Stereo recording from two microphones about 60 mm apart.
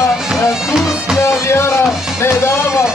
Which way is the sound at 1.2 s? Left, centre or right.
Left.